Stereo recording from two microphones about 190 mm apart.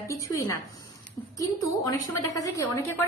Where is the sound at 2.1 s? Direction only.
15° left (ahead or behind).